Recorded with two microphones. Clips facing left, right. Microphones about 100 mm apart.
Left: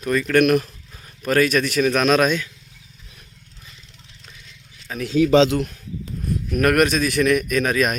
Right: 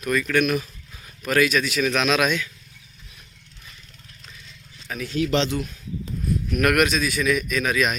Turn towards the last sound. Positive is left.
turn(degrees=45)  # may be behind; listen again after turning